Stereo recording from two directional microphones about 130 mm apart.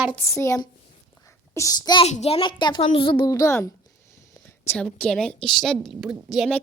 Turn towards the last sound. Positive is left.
turn(degrees=0)  # may be behind; listen again after turning